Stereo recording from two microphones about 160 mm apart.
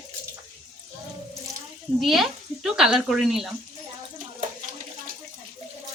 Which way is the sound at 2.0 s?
Centre (ahead or behind).